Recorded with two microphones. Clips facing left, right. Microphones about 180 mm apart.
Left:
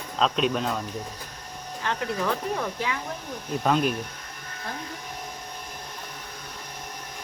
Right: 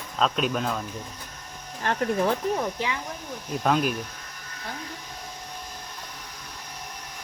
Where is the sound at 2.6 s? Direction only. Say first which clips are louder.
Right 1 dB; 15° right (ahead or behind).